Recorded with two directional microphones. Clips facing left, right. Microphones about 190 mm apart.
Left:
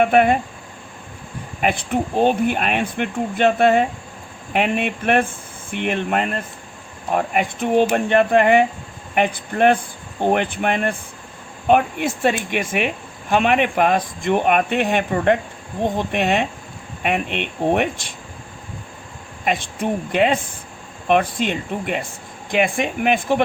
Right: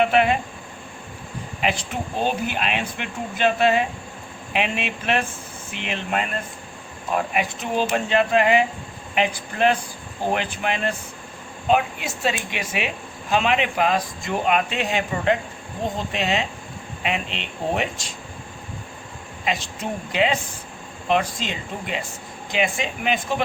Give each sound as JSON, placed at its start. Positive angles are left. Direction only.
{"t": 0.0, "sound": "speech", "side_deg": 50}
{"t": 1.6, "sound": "speech", "side_deg": 55}
{"t": 19.5, "sound": "speech", "side_deg": 55}